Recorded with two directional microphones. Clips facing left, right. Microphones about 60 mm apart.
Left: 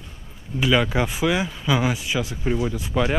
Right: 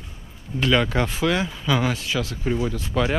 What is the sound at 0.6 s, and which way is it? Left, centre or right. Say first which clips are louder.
Speech: even; centre.